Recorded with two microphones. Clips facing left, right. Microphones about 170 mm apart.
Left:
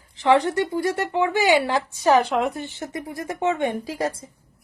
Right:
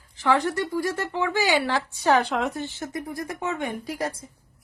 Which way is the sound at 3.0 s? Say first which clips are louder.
Left 8 dB; 20° left (ahead or behind).